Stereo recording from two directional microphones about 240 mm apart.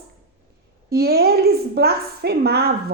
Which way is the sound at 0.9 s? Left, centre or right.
Right.